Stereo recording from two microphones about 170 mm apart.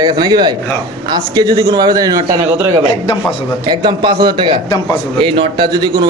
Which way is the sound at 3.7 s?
25° right (ahead or behind).